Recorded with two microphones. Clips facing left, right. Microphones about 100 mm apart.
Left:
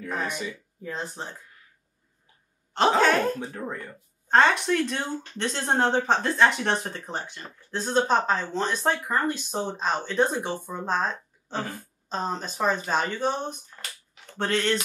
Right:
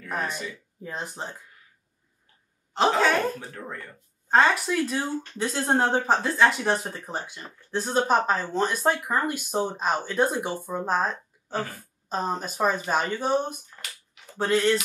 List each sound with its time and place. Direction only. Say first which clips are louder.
0.2 s speech: right 1 dB; 20° left (ahead or behind)
0.8 s speech: even; 15° right (ahead or behind)
2.7 s speech: left 1 dB; centre (ahead or behind)
3.5 s speech: left 4 dB; 20° left (ahead or behind)
4.3 s speech: left 1 dB; 5° right (ahead or behind)
13.8 s speech: left 1 dB; centre (ahead or behind)